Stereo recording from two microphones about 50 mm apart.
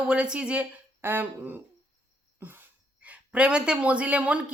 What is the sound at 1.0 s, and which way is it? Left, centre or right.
Speech, right.